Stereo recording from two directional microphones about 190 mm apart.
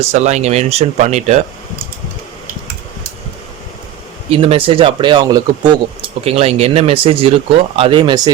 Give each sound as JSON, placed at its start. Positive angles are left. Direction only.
{"t": 0.0, "sound": "speech", "side_deg": -35}
{"t": 4.3, "sound": "speech", "side_deg": -30}